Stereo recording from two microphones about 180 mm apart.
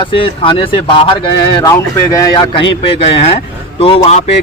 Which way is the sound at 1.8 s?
15° left (ahead or behind).